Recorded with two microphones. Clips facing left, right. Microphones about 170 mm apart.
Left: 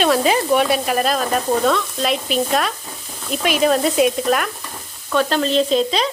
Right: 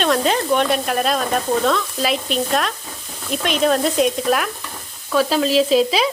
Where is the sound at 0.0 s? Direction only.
5° left (ahead or behind).